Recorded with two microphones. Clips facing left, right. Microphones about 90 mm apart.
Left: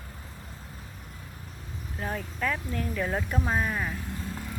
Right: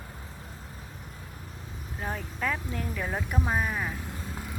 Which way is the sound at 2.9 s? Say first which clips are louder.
Left 2 dB; 5° right (ahead or behind).